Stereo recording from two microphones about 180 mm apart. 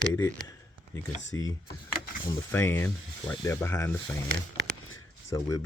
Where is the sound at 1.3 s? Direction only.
15° left (ahead or behind).